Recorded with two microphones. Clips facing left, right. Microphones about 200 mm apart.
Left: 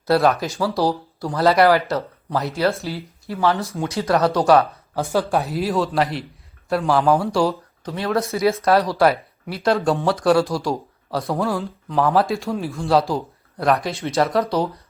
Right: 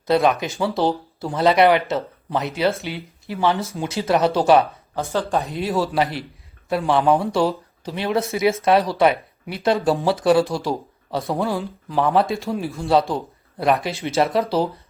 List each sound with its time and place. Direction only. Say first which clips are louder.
0.3 s speech: even; centre (ahead or behind)
3.2 s speech: even; 20° right (ahead or behind)
5.0 s speech: left 2 dB; 10° left (ahead or behind)
7.9 s speech: even; 25° right (ahead or behind)
8.1 s speech: even; centre (ahead or behind)